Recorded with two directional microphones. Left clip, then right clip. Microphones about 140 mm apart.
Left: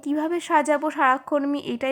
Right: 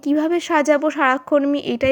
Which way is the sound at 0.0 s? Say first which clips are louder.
Right 6 dB; 25° right (ahead or behind).